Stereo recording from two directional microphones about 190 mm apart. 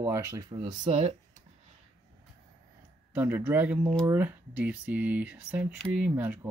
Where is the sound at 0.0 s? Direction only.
15° right (ahead or behind).